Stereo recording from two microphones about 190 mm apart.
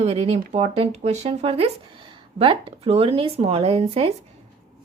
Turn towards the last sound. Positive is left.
turn(degrees=-30)  # may be behind; listen again after turning